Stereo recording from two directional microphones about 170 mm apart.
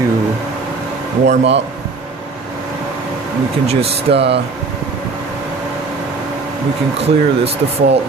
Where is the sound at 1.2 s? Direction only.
90° right.